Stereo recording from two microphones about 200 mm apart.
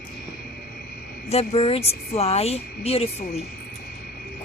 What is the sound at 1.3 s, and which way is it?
A woman's voice, 30° left (ahead or behind).